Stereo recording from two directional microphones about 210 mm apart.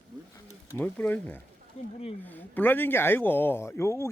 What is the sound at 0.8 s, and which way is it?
Speech, 10° left (ahead or behind).